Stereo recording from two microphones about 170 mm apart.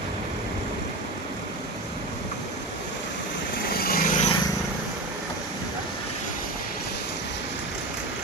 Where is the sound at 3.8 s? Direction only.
60° left (ahead or behind).